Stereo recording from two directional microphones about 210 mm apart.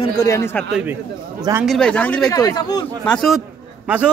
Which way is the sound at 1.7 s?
5° left (ahead or behind).